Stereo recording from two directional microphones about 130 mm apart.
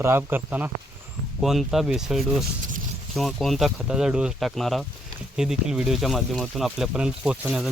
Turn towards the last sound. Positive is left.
turn(degrees=-5)  # may be behind; listen again after turning